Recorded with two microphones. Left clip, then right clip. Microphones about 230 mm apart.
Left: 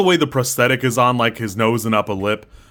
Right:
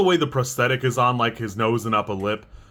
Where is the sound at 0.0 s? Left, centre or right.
Left.